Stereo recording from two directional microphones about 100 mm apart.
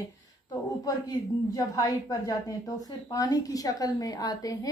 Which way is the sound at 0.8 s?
40° left (ahead or behind).